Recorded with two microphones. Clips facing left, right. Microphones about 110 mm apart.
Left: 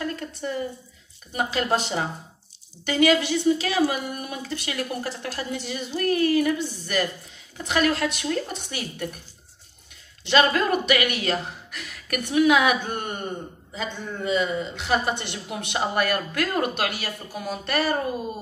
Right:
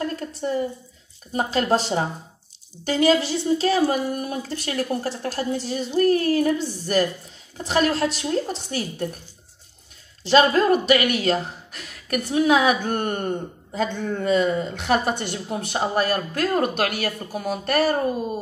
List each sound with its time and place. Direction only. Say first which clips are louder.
0.0 s a woman's voice: right 3 dB; 35° right (ahead or behind)
10.2 s speech: right 4 dB; 35° right (ahead or behind)
12.8 s speech: right 6 dB; 50° right (ahead or behind)